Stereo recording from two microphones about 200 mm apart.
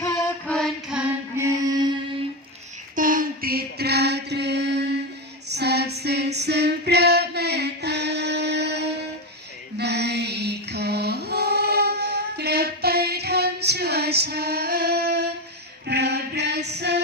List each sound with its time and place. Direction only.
0.0 s music: 15° left (ahead or behind)
0.5 s music: centre (ahead or behind)
2.9 s mantra: 45° right (ahead or behind)
5.5 s female singing: 55° right (ahead or behind)
9.7 s music: 55° right (ahead or behind)
15.9 s female singing: 55° right (ahead or behind)